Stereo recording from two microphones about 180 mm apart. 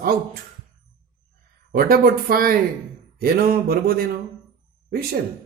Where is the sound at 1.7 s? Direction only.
55° right (ahead or behind).